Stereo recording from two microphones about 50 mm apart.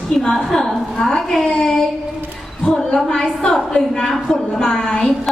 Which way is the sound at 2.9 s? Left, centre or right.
Centre.